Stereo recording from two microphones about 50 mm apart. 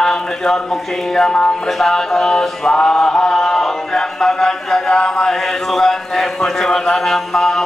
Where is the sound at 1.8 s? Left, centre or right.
Centre.